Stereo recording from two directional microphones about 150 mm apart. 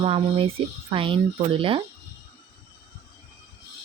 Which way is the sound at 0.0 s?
40° right (ahead or behind).